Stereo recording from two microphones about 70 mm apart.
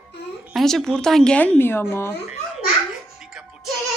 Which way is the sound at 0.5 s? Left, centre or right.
Centre.